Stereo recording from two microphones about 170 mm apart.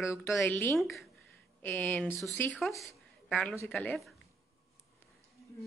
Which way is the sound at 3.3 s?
10° left (ahead or behind).